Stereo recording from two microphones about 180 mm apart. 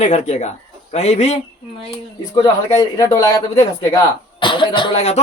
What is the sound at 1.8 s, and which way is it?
Speech, 25° left (ahead or behind).